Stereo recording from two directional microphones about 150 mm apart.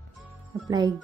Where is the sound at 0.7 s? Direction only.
25° right (ahead or behind).